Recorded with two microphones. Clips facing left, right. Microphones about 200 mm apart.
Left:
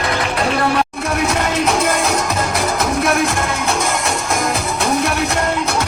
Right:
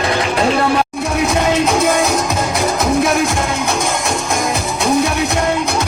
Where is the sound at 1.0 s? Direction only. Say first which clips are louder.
Right 2 dB; centre (ahead or behind).